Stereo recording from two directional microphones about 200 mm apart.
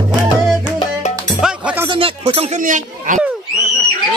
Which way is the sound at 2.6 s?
40° right (ahead or behind).